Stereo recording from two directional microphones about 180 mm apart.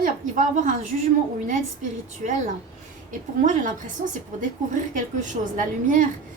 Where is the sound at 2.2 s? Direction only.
45° right (ahead or behind).